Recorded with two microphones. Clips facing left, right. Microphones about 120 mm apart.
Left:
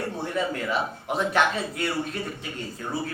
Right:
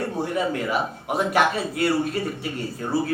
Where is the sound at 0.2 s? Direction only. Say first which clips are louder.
Right 4 dB; 10° right (ahead or behind).